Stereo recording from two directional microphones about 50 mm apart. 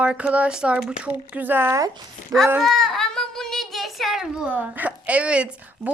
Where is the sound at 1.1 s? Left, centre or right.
Right.